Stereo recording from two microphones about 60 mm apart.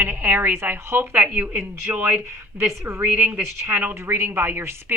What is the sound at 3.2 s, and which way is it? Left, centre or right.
Speech, right.